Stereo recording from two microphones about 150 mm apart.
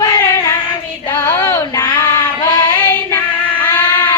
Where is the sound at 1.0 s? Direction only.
25° left (ahead or behind).